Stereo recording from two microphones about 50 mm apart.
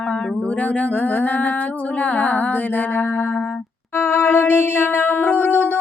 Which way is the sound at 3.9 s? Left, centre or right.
Left.